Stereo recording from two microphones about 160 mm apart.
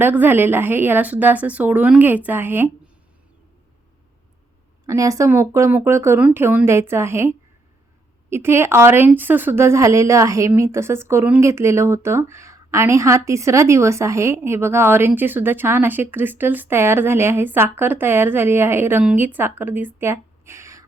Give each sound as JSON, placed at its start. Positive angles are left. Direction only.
{"t": 0.0, "sound": "a woman's voice", "side_deg": -10}
{"t": 4.9, "sound": "a woman's voice", "side_deg": -20}